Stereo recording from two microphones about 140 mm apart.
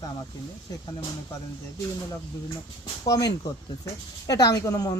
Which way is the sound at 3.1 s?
25° left (ahead or behind).